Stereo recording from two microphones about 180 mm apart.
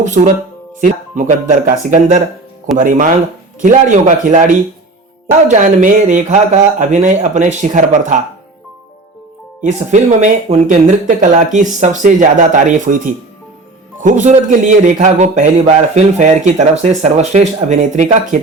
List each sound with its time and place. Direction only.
0.0 s speech: 45° right (ahead or behind)
9.6 s a man's voice: 40° right (ahead or behind)